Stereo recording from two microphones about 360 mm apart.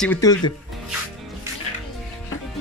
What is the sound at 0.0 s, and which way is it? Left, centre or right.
Speech, centre.